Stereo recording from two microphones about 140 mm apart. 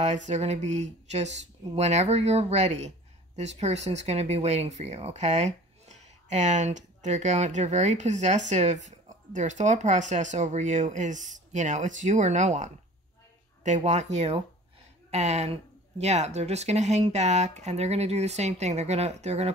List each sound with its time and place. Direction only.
0.0 s speech: 55° right (ahead or behind)